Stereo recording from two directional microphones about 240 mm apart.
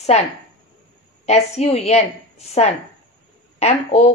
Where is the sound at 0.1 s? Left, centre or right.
Left.